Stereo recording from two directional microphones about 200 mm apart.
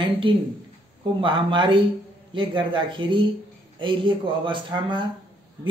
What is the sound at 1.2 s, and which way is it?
A man's voice, 25° right (ahead or behind).